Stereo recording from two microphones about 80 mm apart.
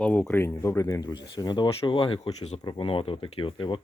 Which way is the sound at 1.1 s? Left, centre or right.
Left.